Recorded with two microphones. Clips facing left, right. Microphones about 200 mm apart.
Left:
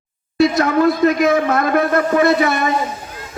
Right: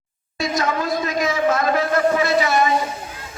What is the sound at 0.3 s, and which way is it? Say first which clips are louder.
A man's voice: left 8 dB; 60° left (ahead or behind).